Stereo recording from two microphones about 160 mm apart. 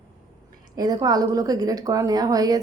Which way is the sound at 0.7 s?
25° right (ahead or behind).